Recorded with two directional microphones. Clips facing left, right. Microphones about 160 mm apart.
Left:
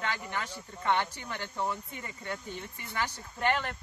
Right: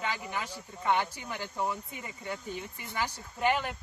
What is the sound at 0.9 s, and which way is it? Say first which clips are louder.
Speech: right 1 dB; 10° right (ahead or behind).